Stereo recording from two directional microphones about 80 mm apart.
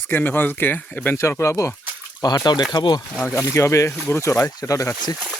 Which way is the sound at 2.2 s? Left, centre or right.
Left.